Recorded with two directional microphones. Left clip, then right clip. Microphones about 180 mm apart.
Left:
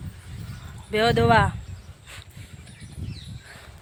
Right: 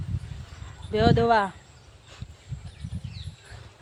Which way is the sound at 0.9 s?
15° left (ahead or behind).